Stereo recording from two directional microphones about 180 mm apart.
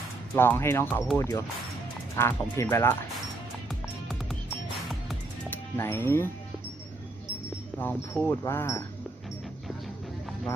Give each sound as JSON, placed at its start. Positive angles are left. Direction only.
{"t": 0.3, "sound": "speech", "side_deg": 10}
{"t": 5.5, "sound": "speech", "side_deg": 15}
{"t": 7.8, "sound": "speech", "side_deg": 10}